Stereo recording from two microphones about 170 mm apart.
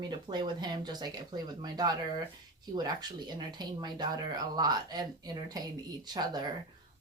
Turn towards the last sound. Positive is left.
turn(degrees=-25)  # may be behind; listen again after turning